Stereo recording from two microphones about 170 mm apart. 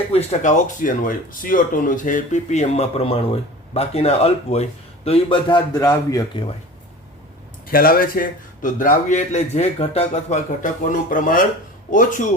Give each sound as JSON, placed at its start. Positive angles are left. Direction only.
{"t": 0.1, "sound": "a man's voice", "side_deg": 40}
{"t": 7.7, "sound": "a man's voice", "side_deg": 60}